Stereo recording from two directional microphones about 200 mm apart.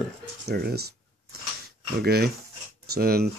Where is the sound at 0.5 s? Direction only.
50° right (ahead or behind).